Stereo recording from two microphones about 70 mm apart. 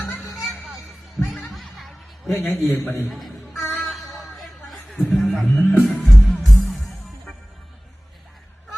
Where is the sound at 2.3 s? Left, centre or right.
Left.